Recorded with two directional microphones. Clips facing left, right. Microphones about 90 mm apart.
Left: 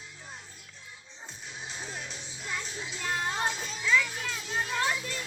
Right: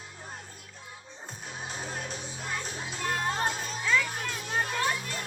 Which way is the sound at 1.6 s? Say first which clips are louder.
Right 3 dB; 50° right (ahead or behind).